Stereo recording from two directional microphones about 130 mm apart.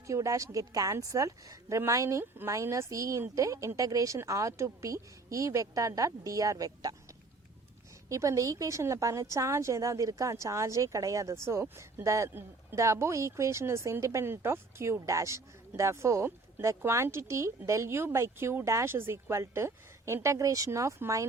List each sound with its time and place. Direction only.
0.1 s a woman's voice: 25° right (ahead or behind)
8.1 s a woman's voice: 25° right (ahead or behind)